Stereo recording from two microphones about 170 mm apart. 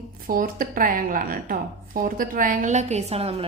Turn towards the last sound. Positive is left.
turn(degrees=-35)  # may be behind; listen again after turning